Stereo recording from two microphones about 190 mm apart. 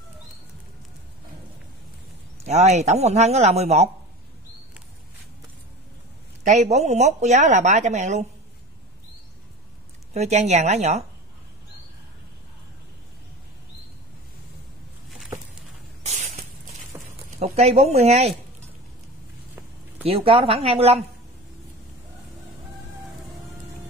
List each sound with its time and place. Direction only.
2.3 s a woman's voice: 35° right (ahead or behind)
6.4 s a woman's voice: 40° right (ahead or behind)
10.1 s a woman's voice: 35° right (ahead or behind)
16.9 s a sound: 15° right (ahead or behind)
17.4 s speech: 35° right (ahead or behind)
20.1 s a woman's voice: 30° right (ahead or behind)